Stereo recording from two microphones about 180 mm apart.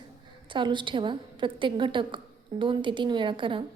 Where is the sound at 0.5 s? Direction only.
25° right (ahead or behind).